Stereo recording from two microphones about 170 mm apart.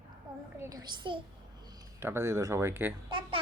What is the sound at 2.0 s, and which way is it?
Speech, 15° right (ahead or behind).